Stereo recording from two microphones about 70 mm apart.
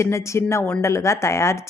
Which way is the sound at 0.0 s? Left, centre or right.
Left.